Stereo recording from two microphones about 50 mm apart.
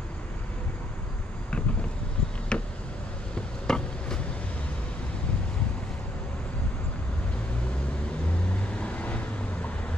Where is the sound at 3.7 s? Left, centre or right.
Centre.